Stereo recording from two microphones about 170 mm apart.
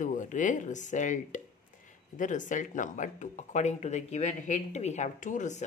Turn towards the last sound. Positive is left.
turn(degrees=45)  # may be behind; listen again after turning